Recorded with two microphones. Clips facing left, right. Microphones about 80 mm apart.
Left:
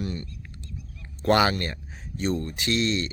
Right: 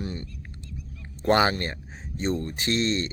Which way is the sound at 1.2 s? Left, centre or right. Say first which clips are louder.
Even; right.